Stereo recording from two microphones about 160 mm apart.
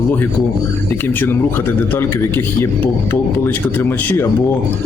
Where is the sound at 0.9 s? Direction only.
10° left (ahead or behind).